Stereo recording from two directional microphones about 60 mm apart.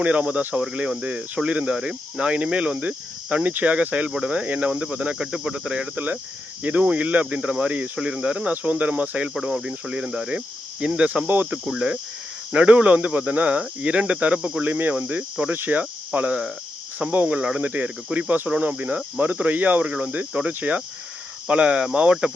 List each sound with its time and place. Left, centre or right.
0.0 s speech: right
5.1 s speech: centre